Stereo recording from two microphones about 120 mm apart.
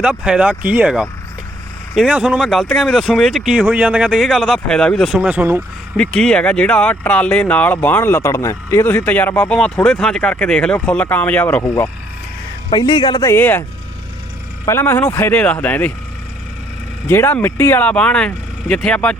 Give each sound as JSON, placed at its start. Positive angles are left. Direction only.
{"t": 0.0, "sound": "speech", "side_deg": -10}
{"t": 5.3, "sound": "speech", "side_deg": -15}
{"t": 6.0, "sound": "speech", "side_deg": 5}
{"t": 12.7, "sound": "speech", "side_deg": 35}
{"t": 13.3, "sound": "speech", "side_deg": 15}
{"t": 14.7, "sound": "speech", "side_deg": 15}
{"t": 17.1, "sound": "speech", "side_deg": 15}